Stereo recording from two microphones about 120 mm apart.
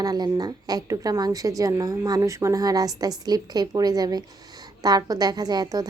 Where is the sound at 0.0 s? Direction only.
35° right (ahead or behind).